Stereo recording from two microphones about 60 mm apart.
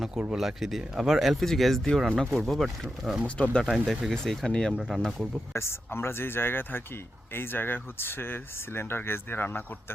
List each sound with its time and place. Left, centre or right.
0.1 s speech: centre
3.2 s speech: centre
3.6 s speech: centre
5.5 s speech: left